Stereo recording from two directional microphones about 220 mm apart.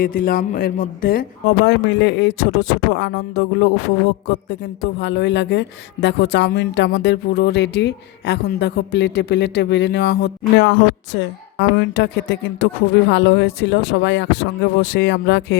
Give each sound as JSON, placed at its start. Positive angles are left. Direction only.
{"t": 0.0, "sound": "speech", "side_deg": 40}
{"t": 1.6, "sound": "speech", "side_deg": 50}